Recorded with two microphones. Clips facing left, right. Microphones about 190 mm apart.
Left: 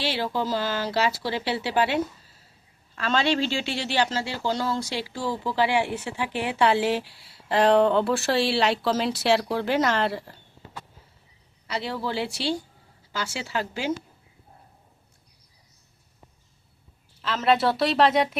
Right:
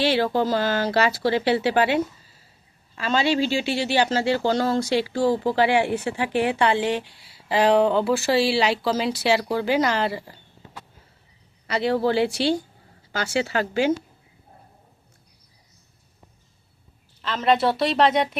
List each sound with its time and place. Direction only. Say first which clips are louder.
0.0 s speech: right 6 dB; 55° right (ahead or behind)
2.9 s speech: right 2 dB; 5° right (ahead or behind)
4.1 s speech: right 7 dB; 60° right (ahead or behind)
6.5 s speech: right 1 dB; 5° left (ahead or behind)
11.6 s speech: right 8 dB; 65° right (ahead or behind)
17.2 s speech: right 1 dB; 5° left (ahead or behind)